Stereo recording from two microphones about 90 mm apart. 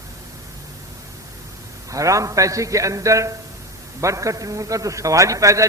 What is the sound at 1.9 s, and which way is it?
A man's voice, 35° right (ahead or behind).